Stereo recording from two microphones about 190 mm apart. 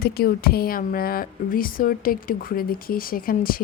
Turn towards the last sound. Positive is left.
turn(degrees=50)  # may be behind; listen again after turning